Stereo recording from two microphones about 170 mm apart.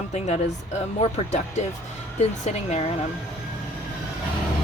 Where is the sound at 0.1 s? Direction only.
40° left (ahead or behind).